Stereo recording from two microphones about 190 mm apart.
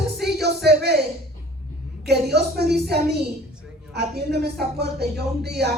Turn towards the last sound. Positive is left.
turn(degrees=-60)  # may be behind; listen again after turning